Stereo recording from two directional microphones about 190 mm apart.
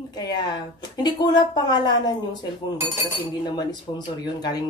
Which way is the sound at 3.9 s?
25° left (ahead or behind).